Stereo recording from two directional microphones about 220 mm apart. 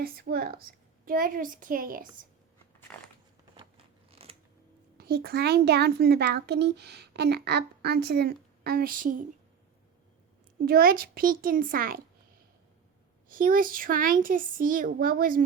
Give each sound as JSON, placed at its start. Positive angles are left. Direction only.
{"t": 0.0, "sound": "a child's voice", "side_deg": -45}
{"t": 2.9, "sound": "a sound", "side_deg": 5}
{"t": 4.1, "sound": "scissors", "side_deg": -25}
{"t": 4.9, "sound": "a child's voice", "side_deg": -45}
{"t": 10.7, "sound": "speech", "side_deg": -40}
{"t": 13.2, "sound": "speech", "side_deg": -40}